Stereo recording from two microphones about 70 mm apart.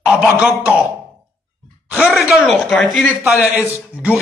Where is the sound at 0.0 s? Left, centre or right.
Centre.